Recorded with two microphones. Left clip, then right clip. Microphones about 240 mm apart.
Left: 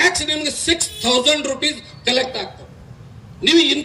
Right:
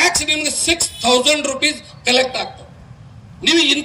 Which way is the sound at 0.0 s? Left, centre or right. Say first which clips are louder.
Right 1 dB; right.